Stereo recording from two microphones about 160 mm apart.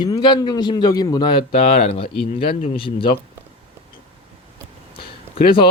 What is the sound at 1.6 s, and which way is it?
Speech, 65° left (ahead or behind).